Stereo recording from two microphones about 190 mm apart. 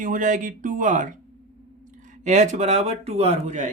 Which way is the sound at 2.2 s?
40° right (ahead or behind).